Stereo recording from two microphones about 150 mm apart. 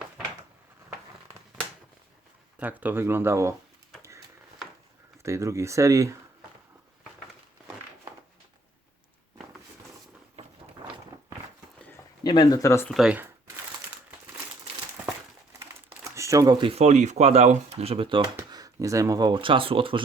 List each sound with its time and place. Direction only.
2.6 s speech: 10° right (ahead or behind)
5.2 s speech: 20° right (ahead or behind)
12.2 s speech: 30° left (ahead or behind)
12.9 s speech: 5° right (ahead or behind)
16.0 s a sound: 20° right (ahead or behind)
16.7 s speech: 50° right (ahead or behind)
18.5 s speech: 25° right (ahead or behind)